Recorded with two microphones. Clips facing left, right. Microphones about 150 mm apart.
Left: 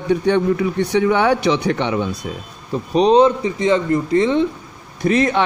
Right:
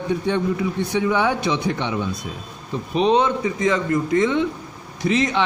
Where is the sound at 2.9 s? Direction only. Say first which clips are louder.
Left 5 dB; 35° left (ahead or behind).